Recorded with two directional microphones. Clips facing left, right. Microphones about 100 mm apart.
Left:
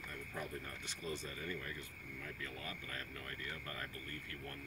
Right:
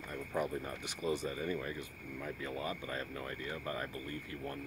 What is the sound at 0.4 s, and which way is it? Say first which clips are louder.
Speech: right 10 dB; 15° right (ahead or behind).